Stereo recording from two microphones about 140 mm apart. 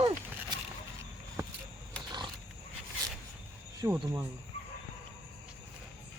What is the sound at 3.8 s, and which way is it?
Speech, 20° right (ahead or behind).